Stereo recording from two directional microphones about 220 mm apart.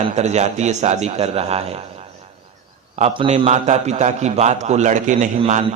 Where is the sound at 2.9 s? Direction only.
25° right (ahead or behind).